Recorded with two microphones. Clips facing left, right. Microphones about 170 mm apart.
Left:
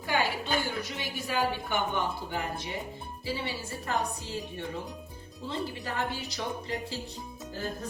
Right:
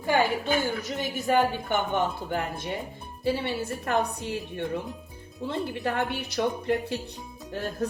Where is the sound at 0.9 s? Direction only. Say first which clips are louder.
Right 9 dB; 50° right (ahead or behind).